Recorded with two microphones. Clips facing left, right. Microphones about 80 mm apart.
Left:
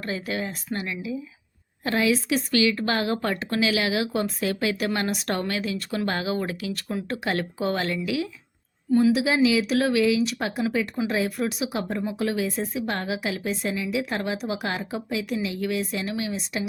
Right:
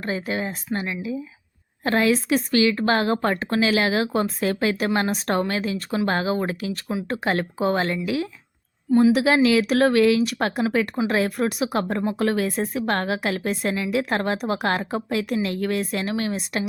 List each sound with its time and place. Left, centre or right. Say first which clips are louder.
0.0 s speech: right 3 dB; right
1.8 s a woman's voice: right 3 dB; right
2.5 s a woman's voice: right 3 dB; right
9.1 s speech: right 3 dB; right